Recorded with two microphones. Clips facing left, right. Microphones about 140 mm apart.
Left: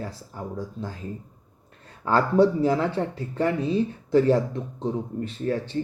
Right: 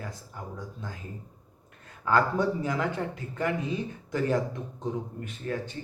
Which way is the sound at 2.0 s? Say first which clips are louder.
Left 5 dB; 35° left (ahead or behind).